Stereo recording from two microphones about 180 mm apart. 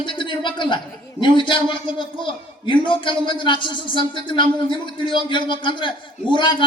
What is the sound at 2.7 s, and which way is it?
A man's voice, 25° left (ahead or behind).